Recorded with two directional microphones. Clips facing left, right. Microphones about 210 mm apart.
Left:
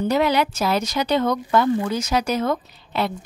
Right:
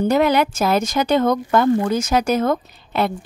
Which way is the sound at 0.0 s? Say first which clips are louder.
Right 3 dB; 50° right (ahead or behind).